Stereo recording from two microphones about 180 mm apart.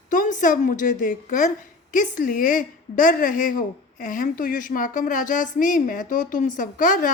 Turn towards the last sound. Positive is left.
turn(degrees=45)  # may be behind; listen again after turning